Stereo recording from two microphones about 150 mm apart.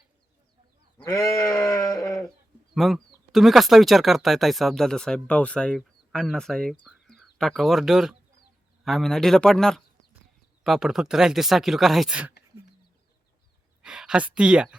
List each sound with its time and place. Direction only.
0.9 s goat: 20° left (ahead or behind)
2.7 s speech: centre (ahead or behind)
13.8 s speech: 5° right (ahead or behind)